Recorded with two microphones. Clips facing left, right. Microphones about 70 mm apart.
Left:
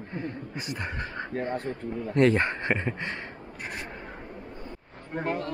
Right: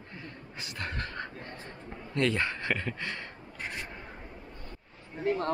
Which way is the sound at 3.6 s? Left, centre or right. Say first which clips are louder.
Left 1 dB; left.